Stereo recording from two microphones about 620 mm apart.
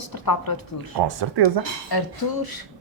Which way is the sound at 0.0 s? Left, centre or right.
Left.